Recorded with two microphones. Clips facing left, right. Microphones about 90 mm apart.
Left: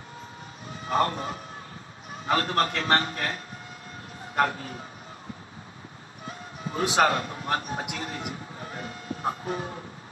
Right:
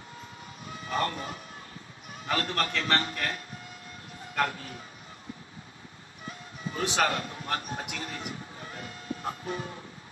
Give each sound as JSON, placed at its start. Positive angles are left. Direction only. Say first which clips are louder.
{"t": 0.8, "sound": "a man's voice", "louder": "left 5 dB", "side_deg": 35}
{"t": 4.4, "sound": "a man's voice", "louder": "left 4 dB", "side_deg": 35}
{"t": 6.2, "sound": "music", "louder": "left 2 dB", "side_deg": 40}
{"t": 7.9, "sound": "a man's voice", "louder": "left 3 dB", "side_deg": 35}